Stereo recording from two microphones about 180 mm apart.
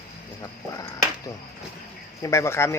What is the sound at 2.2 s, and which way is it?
Speech, 15° left (ahead or behind).